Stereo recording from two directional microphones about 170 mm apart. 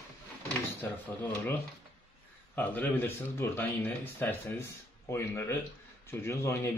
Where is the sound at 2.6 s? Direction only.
10° left (ahead or behind).